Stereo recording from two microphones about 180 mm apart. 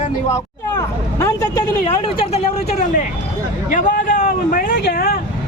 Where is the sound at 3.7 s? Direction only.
45° left (ahead or behind).